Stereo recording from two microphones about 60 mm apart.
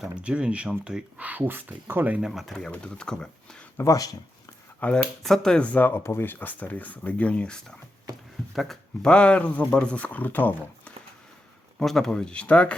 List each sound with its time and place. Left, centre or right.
0.2 s speech: centre
1.2 s speech: right
2.2 s speech: centre
2.7 s speech: centre
3.8 s speech: left
4.8 s speech: left
5.2 s speech: centre
5.6 s speech: left
5.9 s speech: left; by 7.8 s centre
8.5 s speech: centre
9.0 s speech: centre
11.8 s speech: centre